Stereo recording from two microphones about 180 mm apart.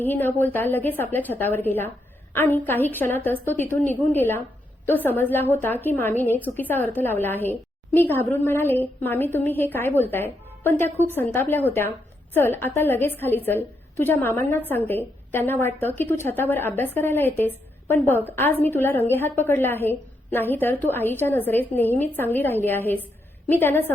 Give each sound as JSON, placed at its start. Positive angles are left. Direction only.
{"t": 0.0, "sound": "a woman's voice", "side_deg": 10}